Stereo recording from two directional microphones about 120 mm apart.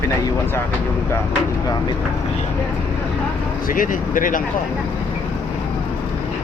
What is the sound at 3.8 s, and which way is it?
Speech, 90° left.